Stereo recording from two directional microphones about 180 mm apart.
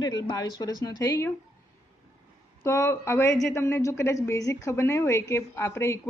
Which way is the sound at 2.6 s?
15° left (ahead or behind).